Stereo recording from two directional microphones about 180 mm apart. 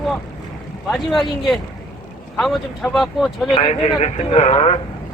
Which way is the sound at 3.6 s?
35° left (ahead or behind).